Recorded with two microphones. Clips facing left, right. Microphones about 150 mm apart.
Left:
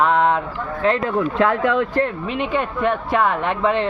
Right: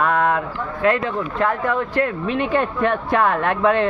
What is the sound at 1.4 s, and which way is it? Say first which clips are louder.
Speech: left 2 dB; 90° left.